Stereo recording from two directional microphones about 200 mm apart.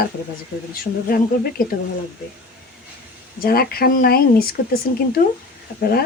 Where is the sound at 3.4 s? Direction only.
50° left (ahead or behind).